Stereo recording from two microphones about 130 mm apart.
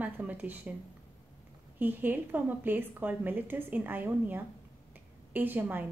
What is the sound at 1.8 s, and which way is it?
A woman's voice, 15° right (ahead or behind).